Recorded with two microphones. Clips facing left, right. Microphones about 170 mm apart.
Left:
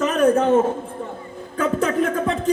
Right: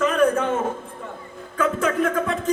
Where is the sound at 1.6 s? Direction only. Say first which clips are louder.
Left 1 dB; 35° left (ahead or behind).